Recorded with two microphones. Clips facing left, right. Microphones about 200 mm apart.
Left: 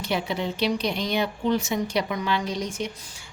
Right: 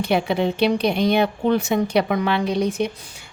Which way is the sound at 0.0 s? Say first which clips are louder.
Right 7 dB; 60° right (ahead or behind).